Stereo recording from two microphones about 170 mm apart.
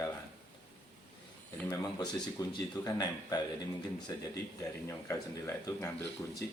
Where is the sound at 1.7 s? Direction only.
20° left (ahead or behind).